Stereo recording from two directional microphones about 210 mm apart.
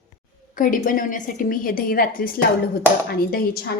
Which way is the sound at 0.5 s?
40° left (ahead or behind).